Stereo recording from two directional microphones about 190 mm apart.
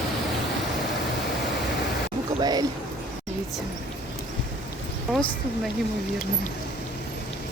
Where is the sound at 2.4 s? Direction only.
20° right (ahead or behind).